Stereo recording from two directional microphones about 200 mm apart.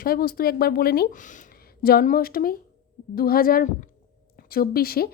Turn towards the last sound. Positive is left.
turn(degrees=50)  # may be behind; listen again after turning